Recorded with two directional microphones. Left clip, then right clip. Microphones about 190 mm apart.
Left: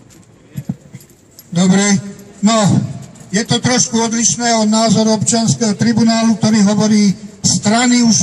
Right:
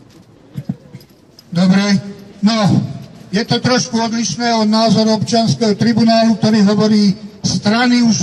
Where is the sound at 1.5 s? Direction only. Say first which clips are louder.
Left 1 dB; 20° left (ahead or behind).